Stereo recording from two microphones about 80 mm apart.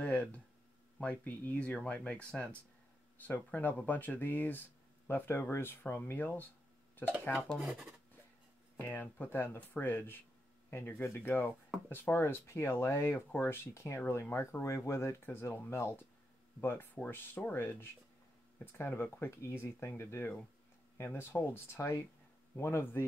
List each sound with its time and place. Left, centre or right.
0.0 s a sound: centre
1.1 s speech: left
7.5 s speech: centre
8.7 s speech: left
18.7 s speech: left